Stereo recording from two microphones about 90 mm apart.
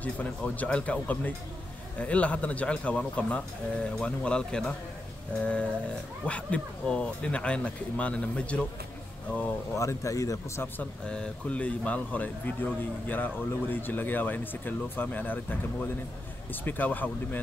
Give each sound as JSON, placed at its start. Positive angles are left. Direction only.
{"t": 0.0, "sound": "speech", "side_deg": 15}
{"t": 9.8, "sound": "speech", "side_deg": 35}
{"t": 11.1, "sound": "a man's voice", "side_deg": 10}